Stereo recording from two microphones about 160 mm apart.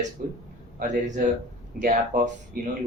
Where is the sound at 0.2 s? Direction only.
60° right (ahead or behind).